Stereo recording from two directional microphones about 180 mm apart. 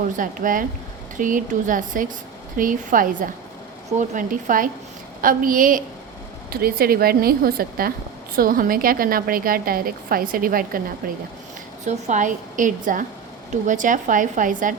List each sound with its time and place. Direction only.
0.2 s a woman's voice: 50° right (ahead or behind)
11.9 s a woman's voice: 40° right (ahead or behind)